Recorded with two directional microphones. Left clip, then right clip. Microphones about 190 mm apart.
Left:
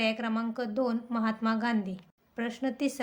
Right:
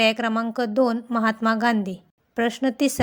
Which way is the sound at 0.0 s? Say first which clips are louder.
Right 10 dB; 45° right (ahead or behind).